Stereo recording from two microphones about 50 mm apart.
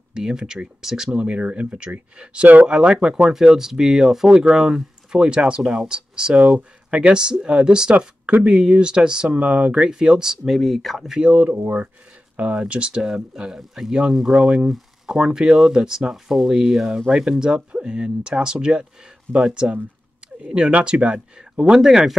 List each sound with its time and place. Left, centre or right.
0.1 s speech: centre
1.2 s speech: right
2.7 s speech: centre
10.5 s speech: centre
11.1 s speech: right
11.6 s speech: right
12.4 s speech: right
21.7 s speech: centre